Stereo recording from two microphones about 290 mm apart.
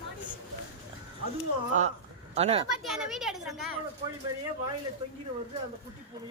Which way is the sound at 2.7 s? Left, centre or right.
Centre.